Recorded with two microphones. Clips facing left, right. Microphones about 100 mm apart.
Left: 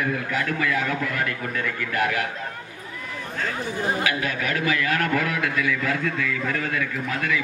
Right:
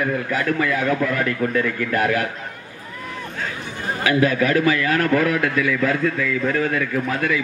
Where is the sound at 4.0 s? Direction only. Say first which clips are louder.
Right 7 dB; 40° right (ahead or behind).